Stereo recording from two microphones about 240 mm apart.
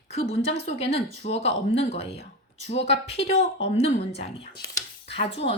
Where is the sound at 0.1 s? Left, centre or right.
Left.